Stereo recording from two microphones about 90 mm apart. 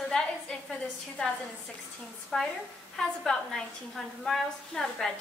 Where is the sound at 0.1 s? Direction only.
5° left (ahead or behind).